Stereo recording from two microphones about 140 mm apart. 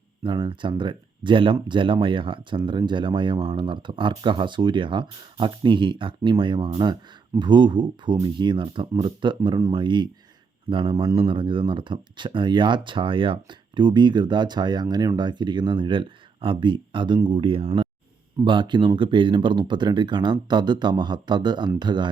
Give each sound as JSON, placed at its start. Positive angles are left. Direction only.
{"t": 0.2, "sound": "speech", "side_deg": -35}